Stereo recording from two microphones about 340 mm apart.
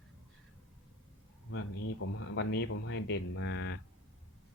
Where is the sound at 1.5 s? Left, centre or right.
Left.